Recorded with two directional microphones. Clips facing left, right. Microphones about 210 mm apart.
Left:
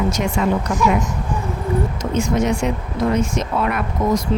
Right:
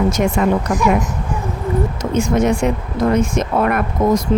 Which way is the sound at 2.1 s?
55° right (ahead or behind).